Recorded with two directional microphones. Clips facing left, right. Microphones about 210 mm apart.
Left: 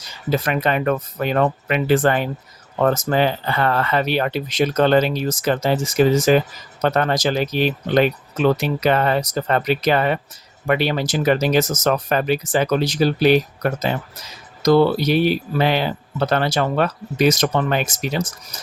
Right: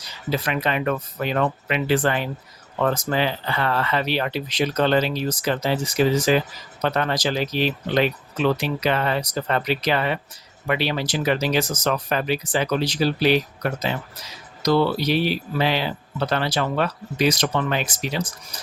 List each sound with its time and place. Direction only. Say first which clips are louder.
0.0 s speech: left 4 dB; 45° left (ahead or behind)